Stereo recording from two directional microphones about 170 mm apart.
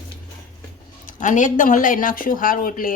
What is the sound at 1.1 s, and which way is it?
Speech, 45° left (ahead or behind).